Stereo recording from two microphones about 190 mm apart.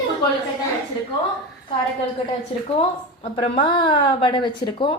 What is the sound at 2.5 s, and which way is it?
A woman's voice, 30° left (ahead or behind).